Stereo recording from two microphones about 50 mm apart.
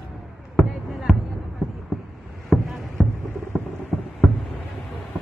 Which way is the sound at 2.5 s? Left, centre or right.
Centre.